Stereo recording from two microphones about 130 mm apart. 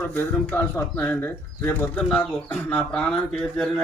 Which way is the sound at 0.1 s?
15° left (ahead or behind).